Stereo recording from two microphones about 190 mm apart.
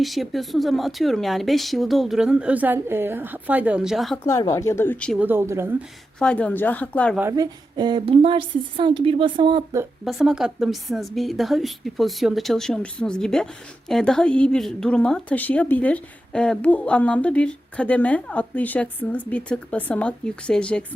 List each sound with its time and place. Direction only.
0.0 s a woman's voice: centre (ahead or behind)
4.3 s speech: 15° left (ahead or behind)
5.1 s speech: 10° right (ahead or behind)
6.1 s speech: 5° left (ahead or behind)
7.2 s a woman's voice: 15° right (ahead or behind)
10.0 s a woman's voice: centre (ahead or behind)